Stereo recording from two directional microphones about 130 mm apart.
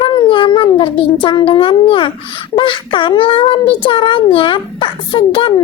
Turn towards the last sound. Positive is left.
turn(degrees=40)  # may be behind; listen again after turning